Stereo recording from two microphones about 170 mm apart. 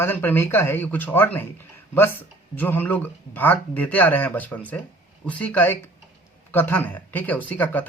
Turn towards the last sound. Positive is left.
turn(degrees=10)  # may be behind; listen again after turning